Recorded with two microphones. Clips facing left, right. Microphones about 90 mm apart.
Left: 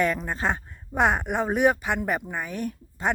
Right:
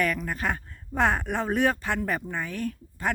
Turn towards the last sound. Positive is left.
turn(degrees=20)  # may be behind; listen again after turning